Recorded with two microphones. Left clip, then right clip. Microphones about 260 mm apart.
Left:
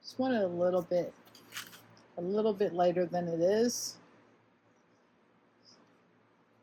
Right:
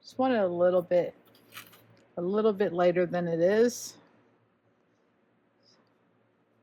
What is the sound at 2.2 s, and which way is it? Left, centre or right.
Speech, right.